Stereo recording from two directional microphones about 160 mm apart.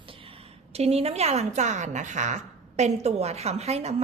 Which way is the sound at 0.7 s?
40° right (ahead or behind).